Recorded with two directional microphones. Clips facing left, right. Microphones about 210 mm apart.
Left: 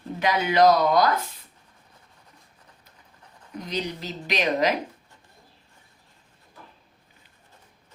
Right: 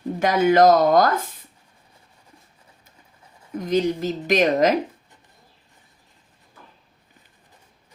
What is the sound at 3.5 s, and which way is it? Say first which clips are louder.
A woman's voice: right 10 dB; 50° right (ahead or behind).